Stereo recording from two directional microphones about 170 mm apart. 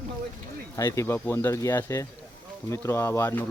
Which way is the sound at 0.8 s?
15° left (ahead or behind).